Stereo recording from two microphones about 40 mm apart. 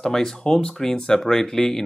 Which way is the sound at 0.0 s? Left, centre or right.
Centre.